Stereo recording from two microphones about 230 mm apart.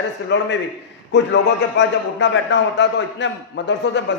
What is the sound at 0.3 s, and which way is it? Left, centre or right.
A man's voice, left.